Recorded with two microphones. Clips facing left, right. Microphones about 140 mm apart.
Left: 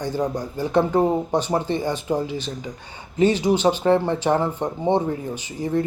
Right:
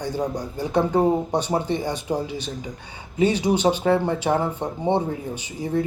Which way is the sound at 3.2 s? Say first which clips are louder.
Left 2 dB; 15° right (ahead or behind).